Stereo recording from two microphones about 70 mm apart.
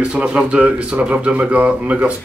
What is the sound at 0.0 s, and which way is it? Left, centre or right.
Speech, centre.